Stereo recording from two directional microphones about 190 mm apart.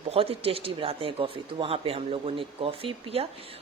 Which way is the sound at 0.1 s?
30° right (ahead or behind).